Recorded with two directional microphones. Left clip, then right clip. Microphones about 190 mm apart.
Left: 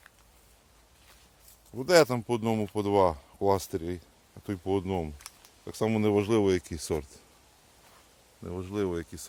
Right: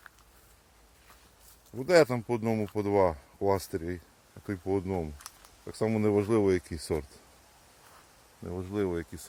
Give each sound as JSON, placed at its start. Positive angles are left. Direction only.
{"t": 1.7, "sound": "speech", "side_deg": 10}
{"t": 8.4, "sound": "speech", "side_deg": 5}